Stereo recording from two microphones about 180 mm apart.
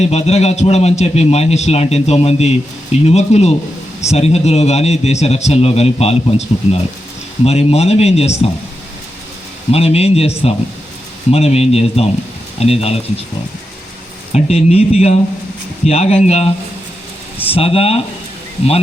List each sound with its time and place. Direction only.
0.0 s a man's voice: 35° left (ahead or behind)
9.7 s a man's voice: 35° left (ahead or behind)
14.3 s a man's voice: 35° left (ahead or behind)
17.5 s a man's voice: 35° left (ahead or behind)